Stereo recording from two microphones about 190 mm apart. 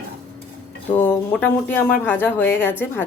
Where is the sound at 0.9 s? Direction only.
10° left (ahead or behind).